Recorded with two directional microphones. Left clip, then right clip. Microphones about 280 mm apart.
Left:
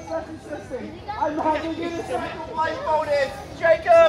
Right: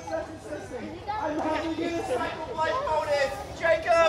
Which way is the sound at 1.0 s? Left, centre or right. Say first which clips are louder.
Left 6 dB; right.